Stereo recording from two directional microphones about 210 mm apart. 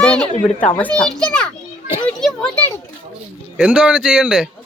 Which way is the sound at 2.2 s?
5° left (ahead or behind).